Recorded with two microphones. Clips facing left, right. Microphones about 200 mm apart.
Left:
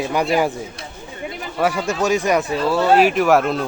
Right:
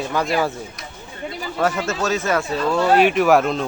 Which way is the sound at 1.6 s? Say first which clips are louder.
Left 2 dB; 10° left (ahead or behind).